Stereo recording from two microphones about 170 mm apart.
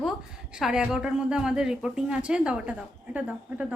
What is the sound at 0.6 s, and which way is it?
A woman's voice, 5° right (ahead or behind).